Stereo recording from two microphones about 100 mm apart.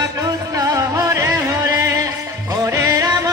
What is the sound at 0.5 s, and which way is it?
Music, 35° right (ahead or behind).